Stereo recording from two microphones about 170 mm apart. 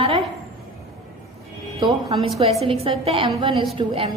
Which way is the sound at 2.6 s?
35° right (ahead or behind).